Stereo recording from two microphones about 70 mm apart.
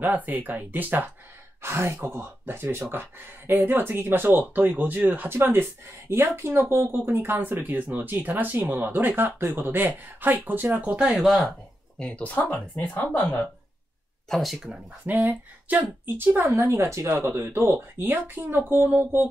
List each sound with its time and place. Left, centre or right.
0.0 s speech: right
1.6 s speech: right
11.1 s speech: centre
12.0 s speech: centre
14.3 s speech: centre
15.7 s speech: right
16.4 s speech: right